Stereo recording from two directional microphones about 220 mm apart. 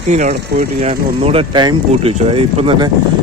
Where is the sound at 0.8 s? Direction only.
30° right (ahead or behind).